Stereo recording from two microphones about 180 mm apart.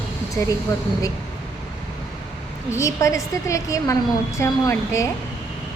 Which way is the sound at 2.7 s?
15° left (ahead or behind).